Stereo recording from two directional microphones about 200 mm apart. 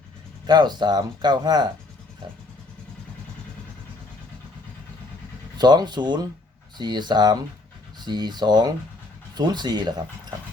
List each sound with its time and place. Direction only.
0.4 s speech: 20° right (ahead or behind)
5.5 s speech: 20° right (ahead or behind)